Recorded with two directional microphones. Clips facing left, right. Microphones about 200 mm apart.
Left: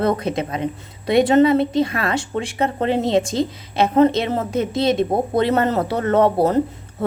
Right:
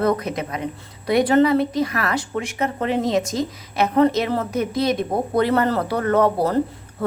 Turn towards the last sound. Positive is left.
turn(degrees=25)  # may be behind; listen again after turning